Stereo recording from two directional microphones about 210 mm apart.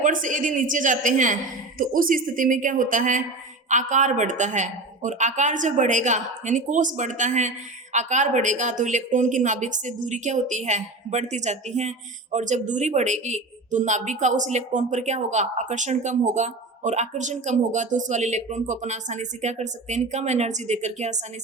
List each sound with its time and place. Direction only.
0.0 s speech: 40° right (ahead or behind)